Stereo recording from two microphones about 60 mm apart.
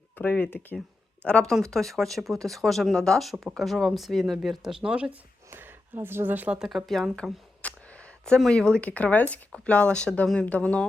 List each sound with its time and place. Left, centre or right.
0.2 s speech: left
1.2 s speech: centre
1.7 s speech: centre
5.5 s speech: right
6.7 s speech: centre
7.6 s a sound: left
8.4 s speech: centre